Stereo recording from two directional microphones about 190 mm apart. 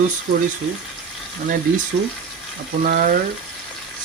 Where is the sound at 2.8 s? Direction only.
45° right (ahead or behind).